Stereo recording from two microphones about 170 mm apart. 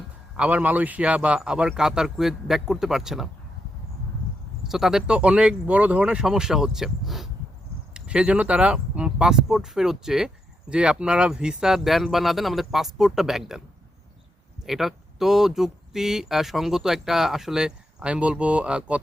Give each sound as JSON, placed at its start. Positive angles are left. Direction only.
{"t": 0.3, "sound": "speech", "side_deg": -10}
{"t": 4.6, "sound": "speech", "side_deg": 0}
{"t": 14.6, "sound": "speech", "side_deg": 0}